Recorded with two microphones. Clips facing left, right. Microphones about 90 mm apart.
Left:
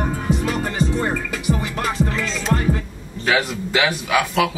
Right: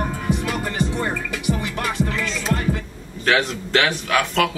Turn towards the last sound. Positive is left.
turn(degrees=5)  # may be behind; listen again after turning